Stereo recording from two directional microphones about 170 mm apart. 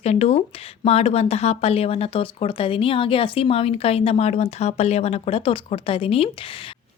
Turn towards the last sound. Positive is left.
turn(degrees=35)  # may be behind; listen again after turning